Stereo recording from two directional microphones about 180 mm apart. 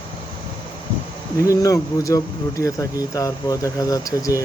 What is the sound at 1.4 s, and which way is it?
Speech, 20° left (ahead or behind).